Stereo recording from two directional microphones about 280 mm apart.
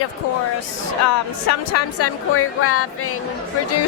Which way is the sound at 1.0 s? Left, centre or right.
Left.